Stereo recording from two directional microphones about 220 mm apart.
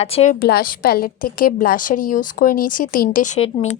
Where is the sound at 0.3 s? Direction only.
45° left (ahead or behind).